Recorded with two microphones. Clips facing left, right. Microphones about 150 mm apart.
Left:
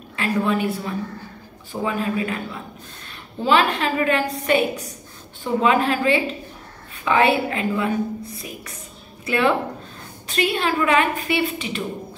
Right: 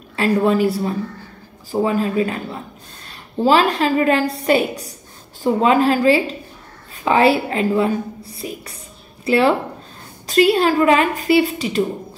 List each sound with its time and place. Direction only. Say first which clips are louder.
0.1 s a woman's voice: right 5 dB; 35° right (ahead or behind)